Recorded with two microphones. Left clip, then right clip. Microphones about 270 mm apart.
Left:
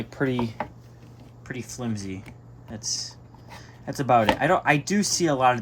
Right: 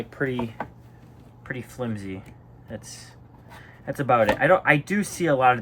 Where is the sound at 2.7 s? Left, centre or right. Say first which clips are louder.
Left 8 dB; centre.